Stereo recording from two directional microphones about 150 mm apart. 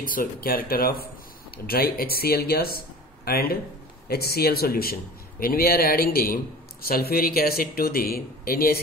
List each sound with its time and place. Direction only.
0.0 s a man's voice: 65° left (ahead or behind); by 4.9 s 90° left
5.4 s a man's voice: 80° left